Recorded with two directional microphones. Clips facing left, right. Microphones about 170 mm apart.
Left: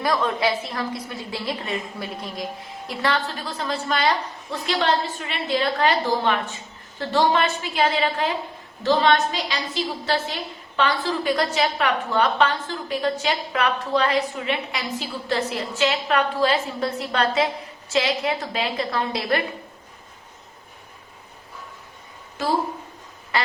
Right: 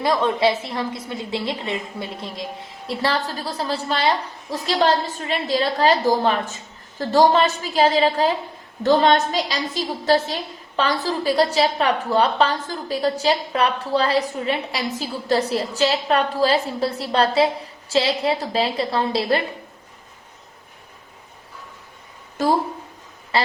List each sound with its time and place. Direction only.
0.0 s a woman's voice: 25° right (ahead or behind)
8.8 s a woman's voice: 50° right (ahead or behind); by 19.4 s 30° right (ahead or behind)